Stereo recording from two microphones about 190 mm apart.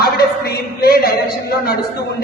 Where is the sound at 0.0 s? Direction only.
55° left (ahead or behind).